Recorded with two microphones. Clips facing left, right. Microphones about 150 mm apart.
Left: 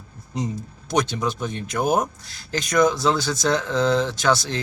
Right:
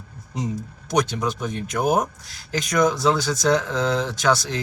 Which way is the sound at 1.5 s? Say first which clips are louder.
Right 1 dB; 15° right (ahead or behind).